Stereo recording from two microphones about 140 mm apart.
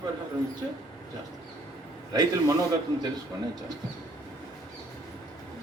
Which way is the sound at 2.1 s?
25° right (ahead or behind).